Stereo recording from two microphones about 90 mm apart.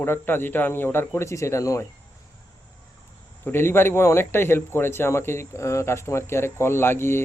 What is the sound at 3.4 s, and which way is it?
Speech, 25° left (ahead or behind).